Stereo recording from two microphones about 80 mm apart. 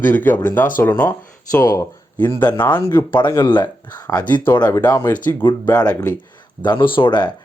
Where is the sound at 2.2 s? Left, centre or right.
Left.